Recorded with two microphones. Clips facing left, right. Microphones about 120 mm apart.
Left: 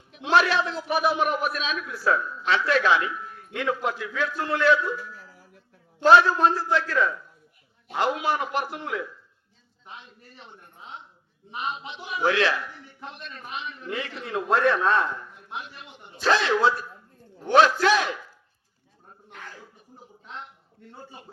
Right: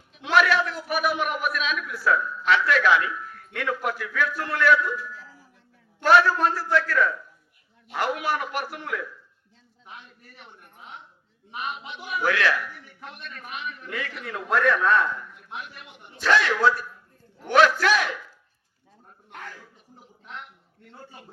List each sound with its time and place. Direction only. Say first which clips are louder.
0.2 s a man's voice: even; 30° left (ahead or behind)
6.0 s a man's voice: left 2 dB; 20° left (ahead or behind)
11.5 s a man's voice: left 1 dB; 25° left (ahead or behind)
20.9 s a man's voice: left 1 dB; 15° left (ahead or behind)